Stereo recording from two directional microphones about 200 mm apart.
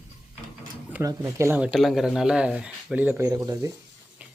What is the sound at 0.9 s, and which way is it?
Speech, 15° right (ahead or behind).